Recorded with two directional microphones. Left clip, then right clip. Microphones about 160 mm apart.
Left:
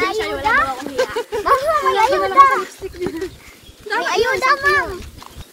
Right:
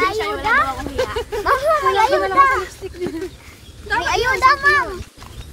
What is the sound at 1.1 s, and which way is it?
Speech, 15° right (ahead or behind).